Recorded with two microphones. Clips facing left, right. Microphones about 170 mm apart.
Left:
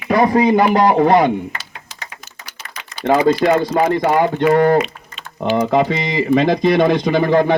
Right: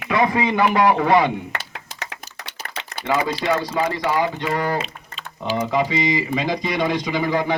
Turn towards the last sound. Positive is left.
turn(degrees=55)  # may be behind; listen again after turning